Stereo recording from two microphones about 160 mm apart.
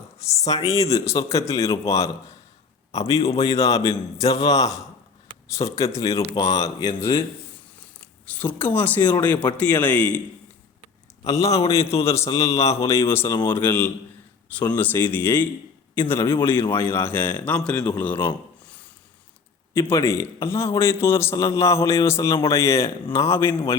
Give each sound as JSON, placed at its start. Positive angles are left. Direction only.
{"t": 0.2, "sound": "speech", "side_deg": 20}
{"t": 3.2, "sound": "speech", "side_deg": 25}
{"t": 8.0, "sound": "a man's voice", "side_deg": 10}
{"t": 11.3, "sound": "speech", "side_deg": 20}
{"t": 11.6, "sound": "a man's voice", "side_deg": 40}
{"t": 12.0, "sound": "a man's voice", "side_deg": 20}
{"t": 19.9, "sound": "a man's voice", "side_deg": 15}